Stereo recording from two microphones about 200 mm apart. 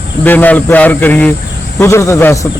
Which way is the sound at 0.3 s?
10° left (ahead or behind).